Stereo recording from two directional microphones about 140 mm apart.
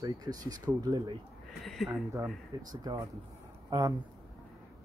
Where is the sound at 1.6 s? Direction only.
Centre (ahead or behind).